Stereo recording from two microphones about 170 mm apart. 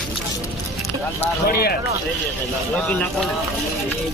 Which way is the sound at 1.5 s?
65° left (ahead or behind).